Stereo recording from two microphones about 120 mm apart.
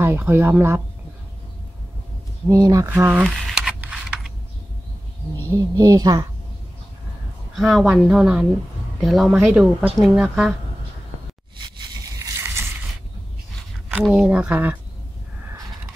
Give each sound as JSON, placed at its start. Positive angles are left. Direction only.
{"t": 0.0, "sound": "speech", "side_deg": -20}
{"t": 2.6, "sound": "speech", "side_deg": -25}
{"t": 2.9, "sound": "speech", "side_deg": -15}
{"t": 3.3, "sound": "a sound", "side_deg": 0}
{"t": 5.5, "sound": "a woman's voice", "side_deg": -30}
{"t": 7.5, "sound": "speech", "side_deg": 0}
{"t": 9.5, "sound": "speech", "side_deg": -10}
{"t": 13.8, "sound": "speech", "side_deg": -5}